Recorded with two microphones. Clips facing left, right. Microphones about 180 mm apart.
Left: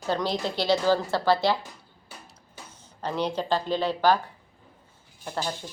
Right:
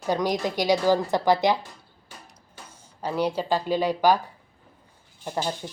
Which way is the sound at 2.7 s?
10° right (ahead or behind).